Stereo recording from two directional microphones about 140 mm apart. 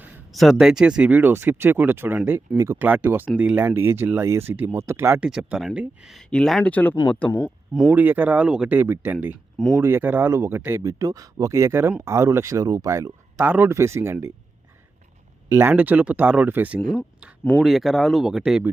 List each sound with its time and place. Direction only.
0.3 s speech: centre (ahead or behind); by 5.2 s 15° right (ahead or behind)
5.2 s speech: 5° right (ahead or behind)
7.3 s speech: 15° left (ahead or behind)
7.9 s speech: 15° right (ahead or behind)
13.4 s speech: 15° right (ahead or behind)
15.4 s speech: 15° right (ahead or behind)
17.6 s speech: centre (ahead or behind)